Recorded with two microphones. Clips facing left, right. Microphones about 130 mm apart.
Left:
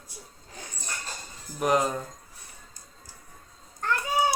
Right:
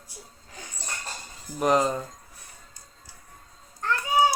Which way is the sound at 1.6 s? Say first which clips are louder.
Right 2 dB; centre (ahead or behind).